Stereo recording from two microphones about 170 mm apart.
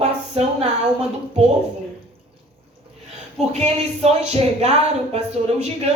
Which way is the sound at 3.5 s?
40° right (ahead or behind).